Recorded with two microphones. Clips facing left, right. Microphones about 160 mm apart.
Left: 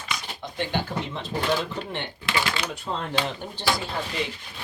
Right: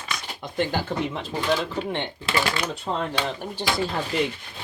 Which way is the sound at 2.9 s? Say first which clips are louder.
Right 4 dB; 25° right (ahead or behind).